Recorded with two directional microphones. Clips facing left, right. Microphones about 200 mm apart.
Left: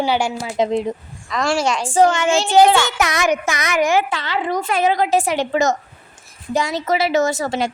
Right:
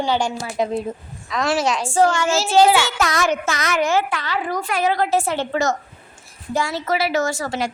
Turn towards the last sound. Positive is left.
turn(degrees=25)  # may be behind; listen again after turning